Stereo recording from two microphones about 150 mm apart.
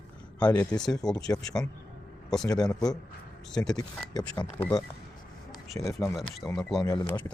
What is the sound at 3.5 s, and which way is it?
Speech, 5° left (ahead or behind).